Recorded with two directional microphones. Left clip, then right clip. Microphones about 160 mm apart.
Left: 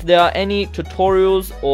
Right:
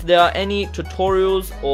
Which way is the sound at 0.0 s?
25° left (ahead or behind).